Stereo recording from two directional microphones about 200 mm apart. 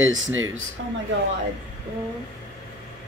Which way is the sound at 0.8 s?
60° right (ahead or behind).